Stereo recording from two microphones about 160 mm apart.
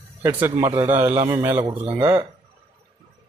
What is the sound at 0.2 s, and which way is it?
A man's voice, 15° right (ahead or behind).